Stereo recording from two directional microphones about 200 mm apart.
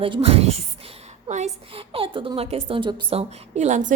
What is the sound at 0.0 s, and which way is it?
A woman's voice, 30° right (ahead or behind).